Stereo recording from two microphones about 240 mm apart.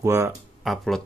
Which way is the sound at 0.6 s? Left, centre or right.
Centre.